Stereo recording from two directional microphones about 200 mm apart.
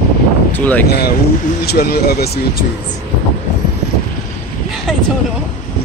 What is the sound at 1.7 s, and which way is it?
Speech, 50° left (ahead or behind).